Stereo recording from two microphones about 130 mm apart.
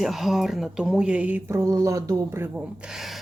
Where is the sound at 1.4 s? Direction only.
20° right (ahead or behind).